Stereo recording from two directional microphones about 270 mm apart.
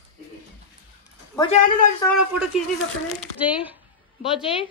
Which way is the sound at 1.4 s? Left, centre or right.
Left.